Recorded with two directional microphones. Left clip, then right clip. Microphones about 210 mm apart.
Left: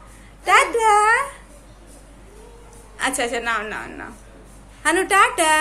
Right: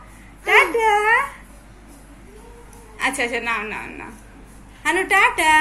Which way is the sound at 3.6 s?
15° left (ahead or behind).